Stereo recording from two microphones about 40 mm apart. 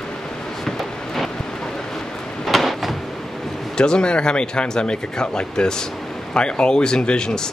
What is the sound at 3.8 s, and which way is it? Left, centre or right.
Speech, left.